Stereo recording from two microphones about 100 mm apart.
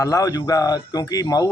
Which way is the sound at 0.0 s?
35° left (ahead or behind).